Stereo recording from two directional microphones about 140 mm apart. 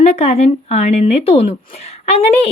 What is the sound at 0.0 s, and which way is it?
Speech, 45° left (ahead or behind).